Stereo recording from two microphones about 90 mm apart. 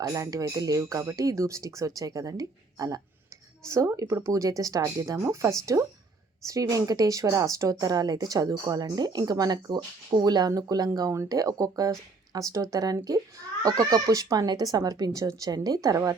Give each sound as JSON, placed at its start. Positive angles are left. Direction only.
{"t": 0.0, "sound": "speech", "side_deg": -40}